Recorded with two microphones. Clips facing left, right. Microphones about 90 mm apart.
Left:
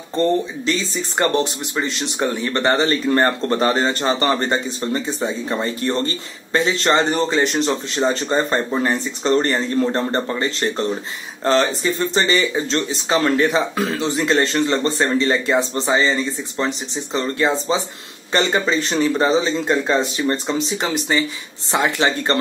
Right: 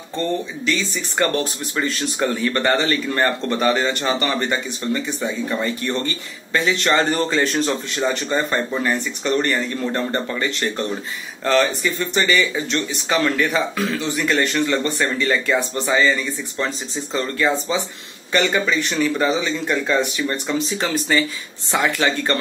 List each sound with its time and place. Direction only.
0.1 s speech: 35° left (ahead or behind)